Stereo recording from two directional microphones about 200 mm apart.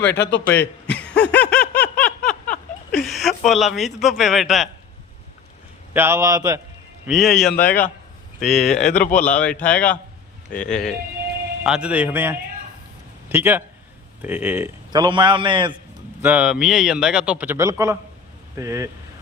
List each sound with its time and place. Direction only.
0.2 s a man's voice: 60° left (ahead or behind)
0.4 s a man's voice: 10° left (ahead or behind)
1.0 s snicker: 60° left (ahead or behind)
1.3 s snicker: 5° left (ahead or behind)
5.9 s a man's voice: 10° right (ahead or behind)
7.1 s a man's voice: centre (ahead or behind)
8.4 s speech: 35° left (ahead or behind)
9.3 s a man's voice: 5° left (ahead or behind); by 15.7 s 25° right (ahead or behind)
16.2 s a man's voice: 5° right (ahead or behind)